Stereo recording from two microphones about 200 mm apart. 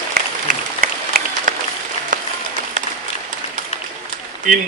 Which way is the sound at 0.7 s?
45° right (ahead or behind).